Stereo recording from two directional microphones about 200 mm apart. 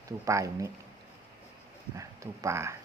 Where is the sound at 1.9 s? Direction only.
15° right (ahead or behind).